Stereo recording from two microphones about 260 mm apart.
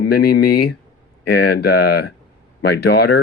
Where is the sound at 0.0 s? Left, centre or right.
Left.